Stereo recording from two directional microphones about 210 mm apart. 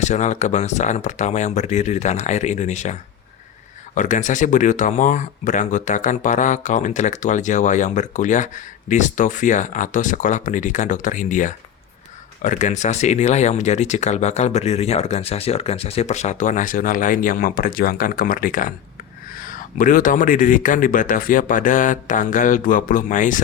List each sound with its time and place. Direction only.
0.0 s speech: 35° left (ahead or behind)